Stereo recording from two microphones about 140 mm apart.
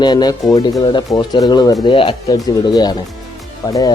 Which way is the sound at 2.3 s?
25° left (ahead or behind).